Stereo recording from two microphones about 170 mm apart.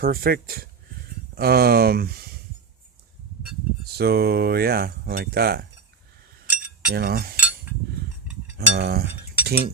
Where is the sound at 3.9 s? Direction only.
65° right (ahead or behind).